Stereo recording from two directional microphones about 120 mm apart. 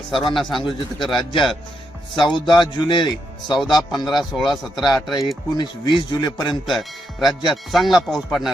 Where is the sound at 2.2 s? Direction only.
40° left (ahead or behind).